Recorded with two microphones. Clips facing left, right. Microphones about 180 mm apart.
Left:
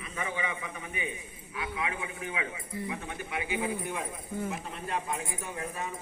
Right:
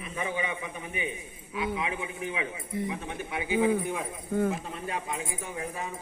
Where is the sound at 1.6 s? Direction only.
25° right (ahead or behind).